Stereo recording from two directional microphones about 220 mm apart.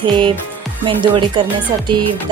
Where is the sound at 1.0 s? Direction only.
20° right (ahead or behind).